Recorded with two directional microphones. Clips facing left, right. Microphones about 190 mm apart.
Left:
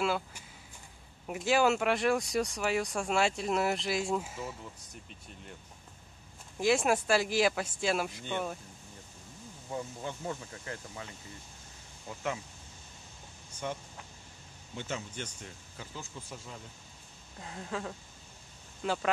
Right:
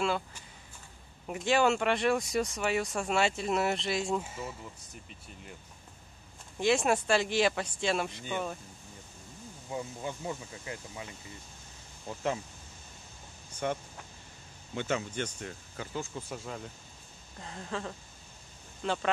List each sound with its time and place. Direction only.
0.0 s speech: 5° left (ahead or behind)
6.6 s speech: centre (ahead or behind)
9.7 s speech: 10° right (ahead or behind)
13.6 s speech: 60° right (ahead or behind)
17.4 s speech: 5° left (ahead or behind)